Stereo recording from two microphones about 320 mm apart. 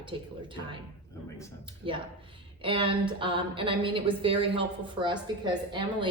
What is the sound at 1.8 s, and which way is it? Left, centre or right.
A woman's voice, centre.